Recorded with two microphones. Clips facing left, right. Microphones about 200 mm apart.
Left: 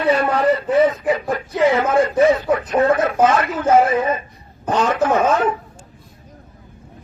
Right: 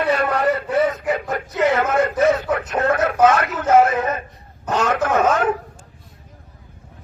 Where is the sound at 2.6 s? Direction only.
50° right (ahead or behind).